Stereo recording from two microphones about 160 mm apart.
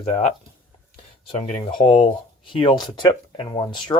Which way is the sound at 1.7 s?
35° left (ahead or behind).